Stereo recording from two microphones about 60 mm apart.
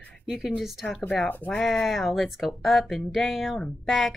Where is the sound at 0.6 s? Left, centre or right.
Centre.